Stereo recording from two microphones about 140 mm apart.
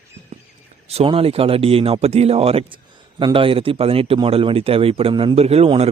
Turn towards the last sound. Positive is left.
turn(degrees=-45)  # may be behind; listen again after turning